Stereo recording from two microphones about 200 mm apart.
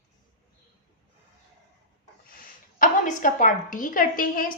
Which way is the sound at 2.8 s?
40° left (ahead or behind).